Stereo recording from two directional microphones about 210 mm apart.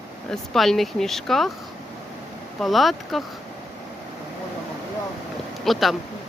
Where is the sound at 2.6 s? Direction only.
Centre (ahead or behind).